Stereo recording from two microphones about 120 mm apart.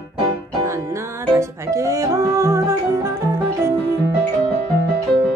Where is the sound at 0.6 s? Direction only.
25° right (ahead or behind).